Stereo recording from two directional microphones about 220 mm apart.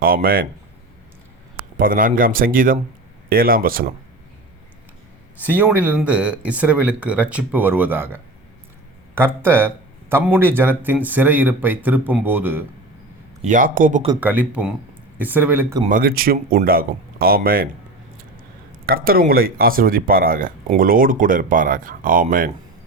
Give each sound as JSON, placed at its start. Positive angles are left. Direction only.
{"t": 0.0, "sound": "speech", "side_deg": -40}
{"t": 1.7, "sound": "speech", "side_deg": -40}
{"t": 5.4, "sound": "speech", "side_deg": -5}
{"t": 13.4, "sound": "speech", "side_deg": -35}
{"t": 14.2, "sound": "speech", "side_deg": -5}
{"t": 15.9, "sound": "speech", "side_deg": -40}
{"t": 18.9, "sound": "speech", "side_deg": -40}